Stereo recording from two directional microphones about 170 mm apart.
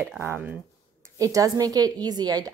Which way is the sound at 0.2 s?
15° right (ahead or behind).